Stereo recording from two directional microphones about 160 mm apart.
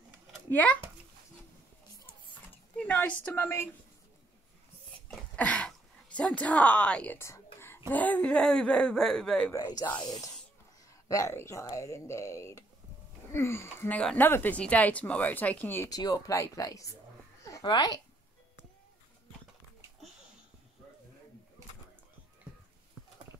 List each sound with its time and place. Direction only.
0.5 s speech: 10° left (ahead or behind)
2.0 s a sound: 15° left (ahead or behind)
3.3 s speech: 15° left (ahead or behind)
5.0 s speech: 10° left (ahead or behind)
9.5 s speech: 20° left (ahead or behind)
9.9 s speech: 5° left (ahead or behind)
11.1 s speech: 20° left (ahead or behind)
15.9 s a child's voice: 20° left (ahead or behind)